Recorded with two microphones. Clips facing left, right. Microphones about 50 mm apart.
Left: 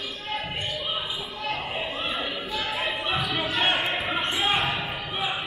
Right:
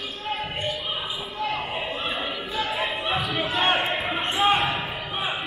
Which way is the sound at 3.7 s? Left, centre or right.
Centre.